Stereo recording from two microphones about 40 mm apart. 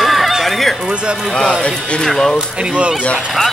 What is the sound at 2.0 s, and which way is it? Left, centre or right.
Speech, centre.